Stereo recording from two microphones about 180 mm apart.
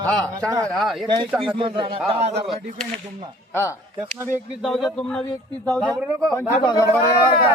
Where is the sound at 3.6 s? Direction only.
15° left (ahead or behind).